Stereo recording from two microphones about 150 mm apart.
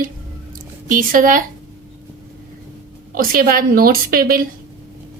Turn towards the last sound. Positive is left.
turn(degrees=-75)  # may be behind; listen again after turning